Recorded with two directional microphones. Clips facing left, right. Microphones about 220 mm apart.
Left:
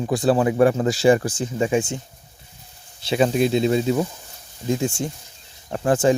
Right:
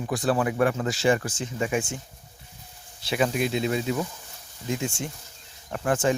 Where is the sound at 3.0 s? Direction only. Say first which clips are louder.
Left 6 dB; 25° left (ahead or behind).